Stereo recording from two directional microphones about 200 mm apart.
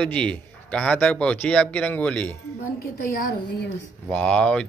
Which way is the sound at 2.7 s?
50° left (ahead or behind).